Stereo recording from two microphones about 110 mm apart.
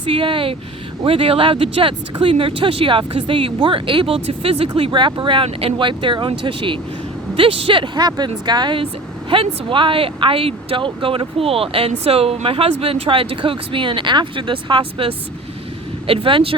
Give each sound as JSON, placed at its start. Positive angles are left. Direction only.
{"t": 0.0, "sound": "speech", "side_deg": -50}
{"t": 8.0, "sound": "speech", "side_deg": -40}